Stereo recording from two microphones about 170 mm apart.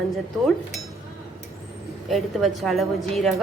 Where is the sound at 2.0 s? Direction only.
Centre (ahead or behind).